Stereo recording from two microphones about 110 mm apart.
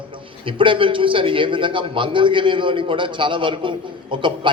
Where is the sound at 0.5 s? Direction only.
50° right (ahead or behind).